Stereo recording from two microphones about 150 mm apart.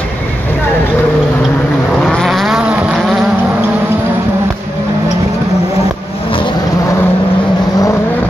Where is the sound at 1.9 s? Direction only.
5° left (ahead or behind).